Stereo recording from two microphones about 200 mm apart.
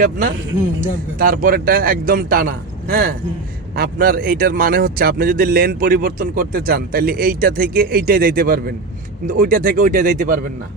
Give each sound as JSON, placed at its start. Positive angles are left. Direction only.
{"t": 0.0, "sound": "speech", "side_deg": -40}